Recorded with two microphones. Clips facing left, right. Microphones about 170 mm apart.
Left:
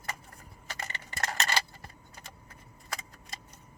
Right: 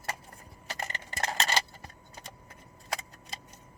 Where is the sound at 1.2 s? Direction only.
20° right (ahead or behind).